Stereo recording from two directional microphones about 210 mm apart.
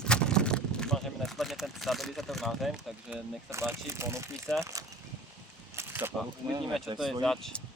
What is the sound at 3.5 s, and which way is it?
Speech, 10° right (ahead or behind).